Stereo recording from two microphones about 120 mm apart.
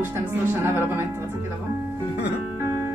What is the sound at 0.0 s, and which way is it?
Speech, 20° right (ahead or behind).